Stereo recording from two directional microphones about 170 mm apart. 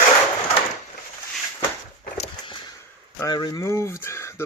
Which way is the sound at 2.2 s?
30° left (ahead or behind).